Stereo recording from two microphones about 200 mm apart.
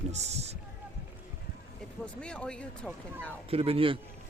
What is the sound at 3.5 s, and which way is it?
Speech, 30° right (ahead or behind).